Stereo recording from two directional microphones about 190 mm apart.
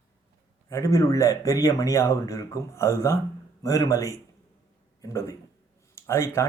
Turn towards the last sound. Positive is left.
turn(degrees=15)  # may be behind; listen again after turning